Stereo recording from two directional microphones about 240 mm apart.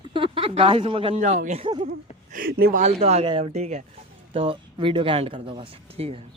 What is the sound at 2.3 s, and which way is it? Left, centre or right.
A man's voice, right.